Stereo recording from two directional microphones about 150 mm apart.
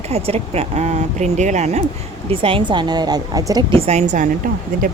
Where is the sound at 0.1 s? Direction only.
40° right (ahead or behind).